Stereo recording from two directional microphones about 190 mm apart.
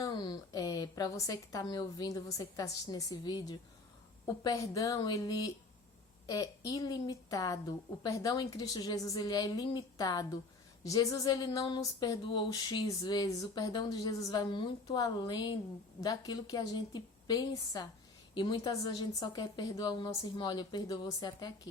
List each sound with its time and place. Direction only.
0.0 s speech: 20° left (ahead or behind)
6.7 s speech: 20° left (ahead or behind)